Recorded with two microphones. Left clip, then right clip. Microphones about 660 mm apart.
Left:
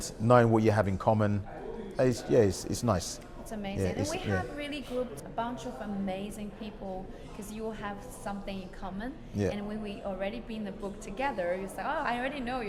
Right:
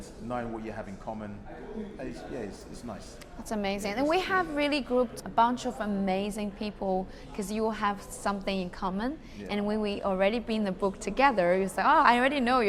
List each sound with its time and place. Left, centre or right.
0.3 s speech: left
3.5 s a woman's voice: right